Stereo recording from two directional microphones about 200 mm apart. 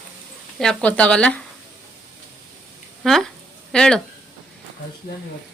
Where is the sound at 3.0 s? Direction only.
Centre (ahead or behind).